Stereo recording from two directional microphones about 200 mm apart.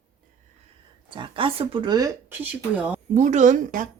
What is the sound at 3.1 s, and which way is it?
Speech, 35° right (ahead or behind).